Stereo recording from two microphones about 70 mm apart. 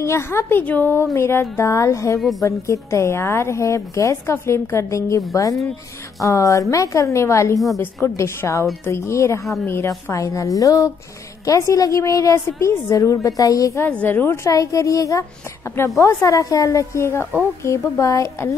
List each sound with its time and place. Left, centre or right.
0.0 s a woman's voice: left
1.1 s a woman's voice: left
13.8 s speech: left
14.4 s a woman's voice: left